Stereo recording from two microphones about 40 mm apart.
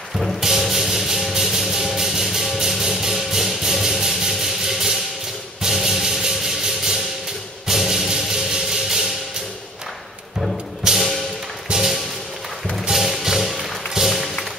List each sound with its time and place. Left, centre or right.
0.4 s music: centre
10.8 s music: centre